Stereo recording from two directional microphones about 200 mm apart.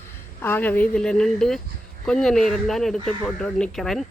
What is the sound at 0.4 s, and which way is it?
Speech, 10° left (ahead or behind).